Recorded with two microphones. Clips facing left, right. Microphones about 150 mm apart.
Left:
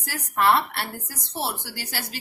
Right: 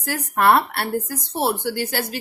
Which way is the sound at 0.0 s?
55° right (ahead or behind).